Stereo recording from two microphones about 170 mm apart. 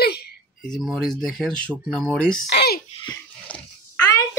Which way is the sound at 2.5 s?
70° left (ahead or behind).